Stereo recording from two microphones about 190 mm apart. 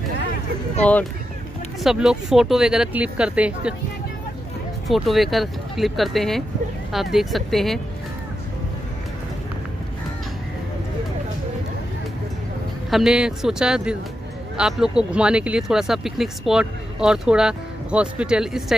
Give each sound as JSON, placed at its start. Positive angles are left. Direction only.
{"t": 1.8, "sound": "speech", "side_deg": 0}
{"t": 4.8, "sound": "speech", "side_deg": 0}
{"t": 12.9, "sound": "speech", "side_deg": -5}